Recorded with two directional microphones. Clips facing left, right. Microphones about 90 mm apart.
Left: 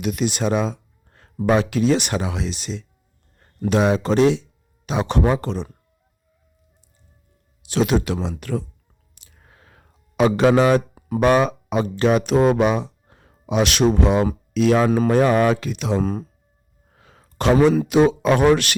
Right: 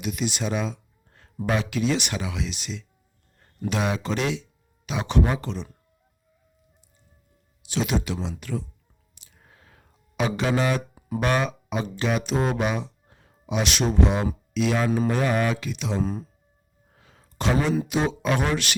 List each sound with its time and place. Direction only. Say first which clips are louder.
0.0 s a sound: left 6 dB; 55° left (ahead or behind)
1.5 s speech: left 7 dB; 40° left (ahead or behind)
7.7 s speech: left 6 dB; 50° left (ahead or behind)
9.1 s a sound: left 2 dB; 55° left (ahead or behind)
11.3 s speech: left 8 dB; 45° left (ahead or behind)
12.3 s speech: left 8 dB; 60° left (ahead or behind)